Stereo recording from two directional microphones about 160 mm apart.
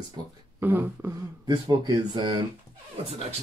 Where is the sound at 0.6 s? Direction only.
10° right (ahead or behind).